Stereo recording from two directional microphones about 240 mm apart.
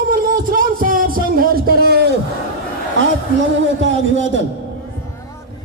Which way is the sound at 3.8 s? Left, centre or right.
Right.